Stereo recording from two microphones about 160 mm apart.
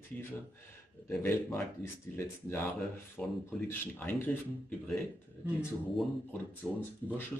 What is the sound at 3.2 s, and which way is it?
Speech, 5° left (ahead or behind).